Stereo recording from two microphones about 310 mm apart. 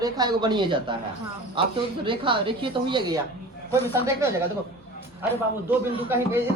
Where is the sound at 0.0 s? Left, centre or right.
Centre.